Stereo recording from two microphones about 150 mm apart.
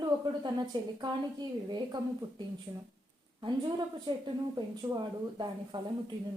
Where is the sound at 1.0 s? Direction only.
30° right (ahead or behind).